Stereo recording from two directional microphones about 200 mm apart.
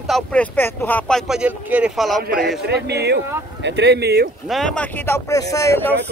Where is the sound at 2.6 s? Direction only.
55° right (ahead or behind).